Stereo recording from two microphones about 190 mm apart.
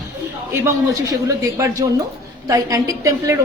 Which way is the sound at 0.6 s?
15° right (ahead or behind).